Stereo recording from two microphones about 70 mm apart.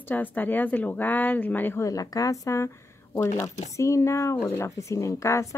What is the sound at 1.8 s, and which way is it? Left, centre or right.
Speech, left.